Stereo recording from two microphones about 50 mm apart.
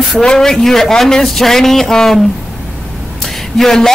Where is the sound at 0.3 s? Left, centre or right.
Centre.